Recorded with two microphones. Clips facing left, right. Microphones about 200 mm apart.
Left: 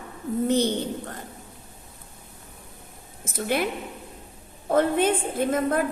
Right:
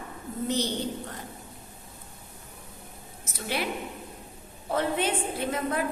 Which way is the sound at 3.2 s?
50° left (ahead or behind).